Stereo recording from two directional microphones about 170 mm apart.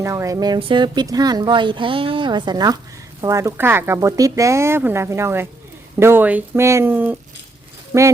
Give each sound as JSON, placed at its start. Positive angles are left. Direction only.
{"t": 0.0, "sound": "a woman's voice", "side_deg": -20}